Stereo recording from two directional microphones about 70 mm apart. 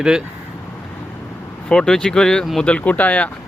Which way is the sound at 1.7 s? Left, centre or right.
Centre.